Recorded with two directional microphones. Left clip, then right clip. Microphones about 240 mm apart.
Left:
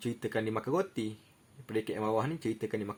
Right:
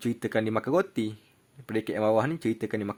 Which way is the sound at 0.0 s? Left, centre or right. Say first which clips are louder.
Right 6 dB; right.